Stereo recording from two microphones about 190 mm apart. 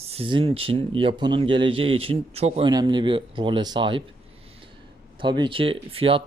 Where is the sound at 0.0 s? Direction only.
30° right (ahead or behind).